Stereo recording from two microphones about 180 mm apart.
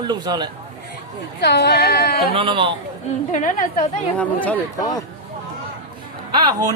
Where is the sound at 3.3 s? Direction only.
45° left (ahead or behind).